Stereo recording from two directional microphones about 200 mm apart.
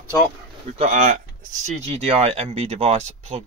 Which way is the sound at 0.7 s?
35° right (ahead or behind).